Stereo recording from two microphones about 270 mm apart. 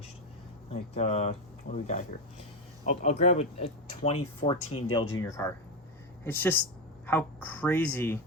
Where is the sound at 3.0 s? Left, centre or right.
Left; by 8.2 s centre.